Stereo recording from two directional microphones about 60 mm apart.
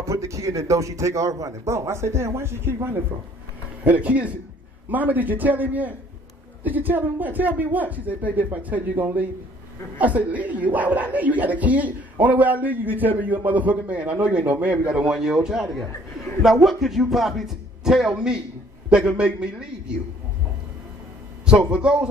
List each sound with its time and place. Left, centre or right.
0.0 s a man's voice: right
1.7 s speech: right
3.8 s a man's voice: right
21.5 s a man's voice: centre